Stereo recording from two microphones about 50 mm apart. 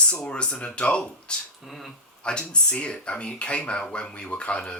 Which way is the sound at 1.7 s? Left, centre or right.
Centre.